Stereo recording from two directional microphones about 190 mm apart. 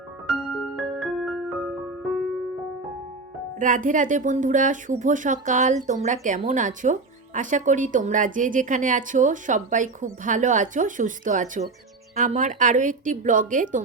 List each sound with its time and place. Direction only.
0.8 s music: centre (ahead or behind)
3.6 s speech: 45° right (ahead or behind)